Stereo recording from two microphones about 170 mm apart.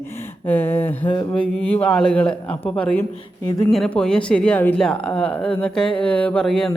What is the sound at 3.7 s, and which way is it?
Speech, 5° left (ahead or behind).